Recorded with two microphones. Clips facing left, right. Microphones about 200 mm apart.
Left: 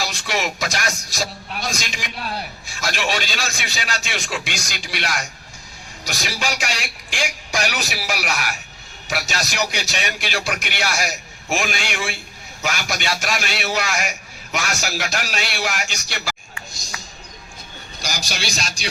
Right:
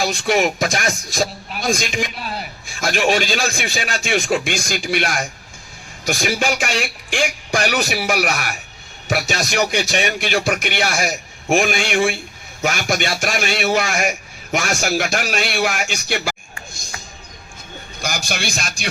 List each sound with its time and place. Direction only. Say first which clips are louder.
0.0 s a man's voice: right 7 dB; 55° right (ahead or behind)
2.1 s speech: even; centre (ahead or behind)
2.6 s a man's voice: right 7 dB; 55° right (ahead or behind)
18.0 s a man's voice: right 4 dB; 55° right (ahead or behind)